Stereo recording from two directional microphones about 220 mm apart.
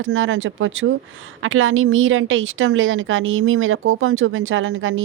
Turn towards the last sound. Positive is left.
turn(degrees=-65)  # may be behind; listen again after turning